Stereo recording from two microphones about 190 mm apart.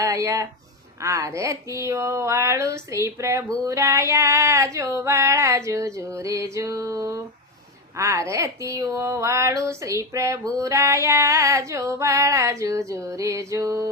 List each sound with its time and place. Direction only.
0.0 s speech: 15° right (ahead or behind)